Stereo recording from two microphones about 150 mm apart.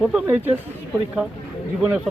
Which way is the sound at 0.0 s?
10° right (ahead or behind).